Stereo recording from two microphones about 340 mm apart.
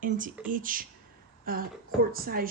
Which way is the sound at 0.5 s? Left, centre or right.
Right.